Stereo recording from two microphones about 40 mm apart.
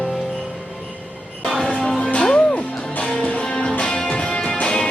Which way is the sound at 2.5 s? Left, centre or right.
Left.